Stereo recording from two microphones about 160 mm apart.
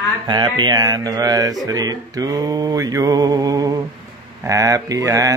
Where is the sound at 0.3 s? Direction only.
25° right (ahead or behind).